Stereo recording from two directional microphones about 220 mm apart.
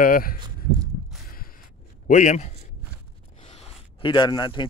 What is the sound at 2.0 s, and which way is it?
Speech, 35° left (ahead or behind).